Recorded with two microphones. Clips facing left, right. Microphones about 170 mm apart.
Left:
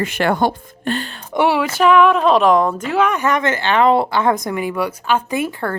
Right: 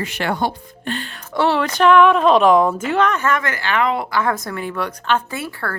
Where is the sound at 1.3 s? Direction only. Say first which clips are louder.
Left 2 dB; 15° left (ahead or behind).